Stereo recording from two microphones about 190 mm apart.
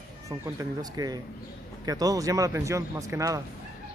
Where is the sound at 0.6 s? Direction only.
20° right (ahead or behind).